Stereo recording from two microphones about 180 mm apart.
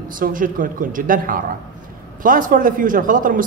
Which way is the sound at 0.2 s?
50° right (ahead or behind).